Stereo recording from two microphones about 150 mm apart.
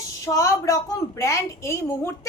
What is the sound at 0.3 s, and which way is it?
A woman's voice, 20° left (ahead or behind).